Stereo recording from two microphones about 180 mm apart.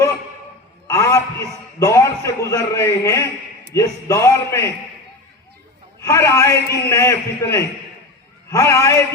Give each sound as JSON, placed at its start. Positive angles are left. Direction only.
{"t": 0.9, "sound": "a man's voice", "side_deg": 15}
{"t": 6.0, "sound": "a man's voice", "side_deg": 15}